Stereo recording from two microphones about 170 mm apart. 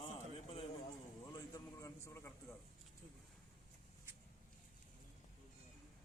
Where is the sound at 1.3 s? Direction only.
20° left (ahead or behind).